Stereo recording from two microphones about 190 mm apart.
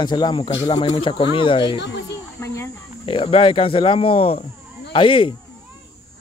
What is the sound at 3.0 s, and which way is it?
Speech, 30° left (ahead or behind).